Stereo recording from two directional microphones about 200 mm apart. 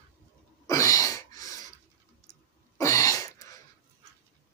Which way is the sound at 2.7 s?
15° left (ahead or behind).